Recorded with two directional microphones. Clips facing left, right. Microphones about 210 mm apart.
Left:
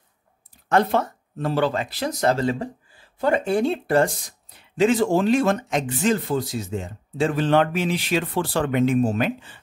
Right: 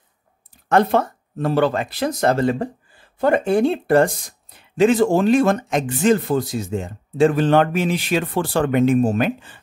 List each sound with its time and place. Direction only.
0.7 s speech: 55° right (ahead or behind)